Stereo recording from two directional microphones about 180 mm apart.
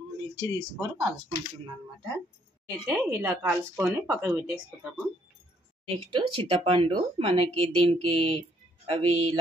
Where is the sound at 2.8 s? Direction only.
15° right (ahead or behind).